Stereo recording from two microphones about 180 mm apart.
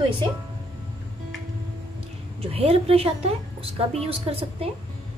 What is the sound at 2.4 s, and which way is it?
A woman's voice, 35° right (ahead or behind).